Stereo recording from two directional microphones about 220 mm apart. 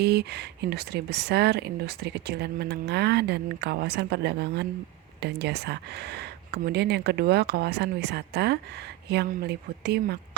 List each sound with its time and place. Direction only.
0.0 s speech: 50° right (ahead or behind)